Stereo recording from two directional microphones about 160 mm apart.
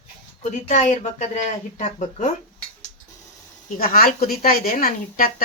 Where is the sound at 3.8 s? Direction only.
65° left (ahead or behind).